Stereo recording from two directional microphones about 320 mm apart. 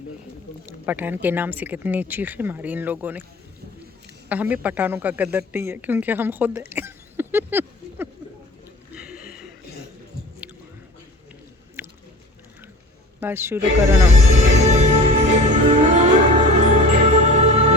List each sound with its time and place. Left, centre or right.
0.9 s speech: centre
4.3 s speech: centre
9.1 s chuckle: left
13.1 s speech: centre
14.3 s music: right